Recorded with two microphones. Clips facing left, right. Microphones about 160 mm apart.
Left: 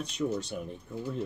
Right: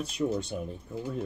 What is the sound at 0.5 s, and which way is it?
Speech, 25° right (ahead or behind).